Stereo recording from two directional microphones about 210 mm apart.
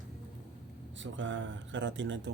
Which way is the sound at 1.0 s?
60° right (ahead or behind).